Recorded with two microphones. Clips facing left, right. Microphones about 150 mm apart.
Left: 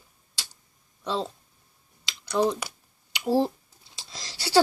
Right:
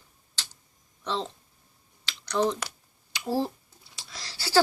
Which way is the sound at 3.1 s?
20° left (ahead or behind).